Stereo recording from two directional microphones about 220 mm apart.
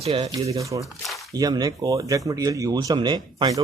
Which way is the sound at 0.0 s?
25° right (ahead or behind).